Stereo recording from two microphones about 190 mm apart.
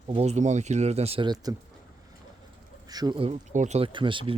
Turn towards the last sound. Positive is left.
turn(degrees=-25)  # may be behind; listen again after turning